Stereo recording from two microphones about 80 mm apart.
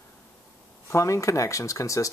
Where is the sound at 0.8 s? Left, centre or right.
Left.